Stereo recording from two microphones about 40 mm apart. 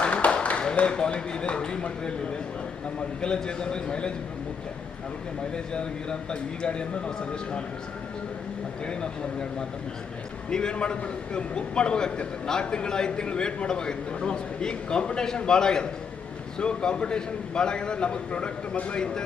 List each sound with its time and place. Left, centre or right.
0.0 s a sound: left
0.8 s a man's voice: left
3.2 s a man's voice: left
5.7 s a man's voice: left
8.9 s a man's voice: left